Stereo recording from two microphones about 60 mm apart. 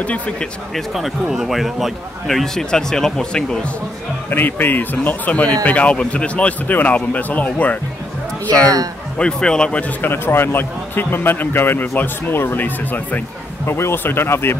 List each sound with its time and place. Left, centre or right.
0.0 s speech: left
0.7 s speech: centre
4.3 s speech: left
9.2 s speech: centre
10.0 s speech: left
13.7 s speech: left